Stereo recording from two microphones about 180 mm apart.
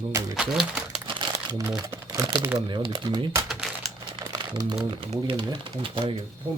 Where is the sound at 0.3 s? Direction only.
5° right (ahead or behind).